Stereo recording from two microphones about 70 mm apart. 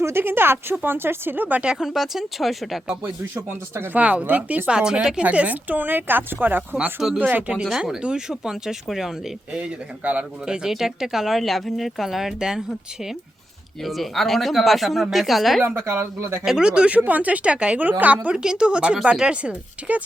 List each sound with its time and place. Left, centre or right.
0.0 s speech: right; by 1.8 s centre
1.8 s speech: centre
3.9 s speech: centre
7.5 s speech: centre
15.6 s speech: right
16.4 s speech: centre